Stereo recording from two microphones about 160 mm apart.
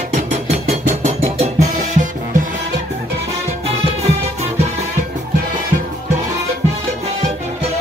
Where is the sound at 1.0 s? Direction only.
45° right (ahead or behind).